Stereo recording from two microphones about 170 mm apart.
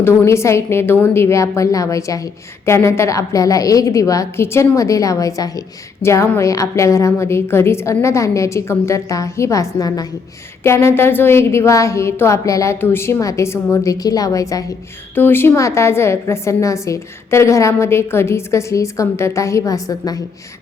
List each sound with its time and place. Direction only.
0.0 s a woman's voice: 15° left (ahead or behind)